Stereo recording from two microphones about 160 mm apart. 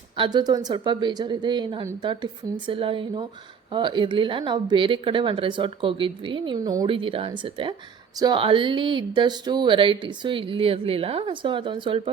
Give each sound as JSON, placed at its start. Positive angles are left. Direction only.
{"t": 0.2, "sound": "a woman's voice", "side_deg": -25}